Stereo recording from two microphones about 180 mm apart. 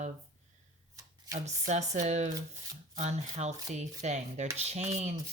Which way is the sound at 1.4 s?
40° right (ahead or behind).